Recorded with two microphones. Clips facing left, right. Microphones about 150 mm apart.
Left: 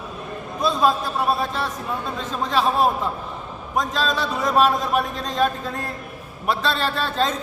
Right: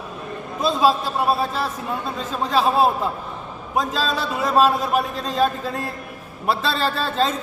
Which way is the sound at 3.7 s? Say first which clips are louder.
Even; 5° right (ahead or behind).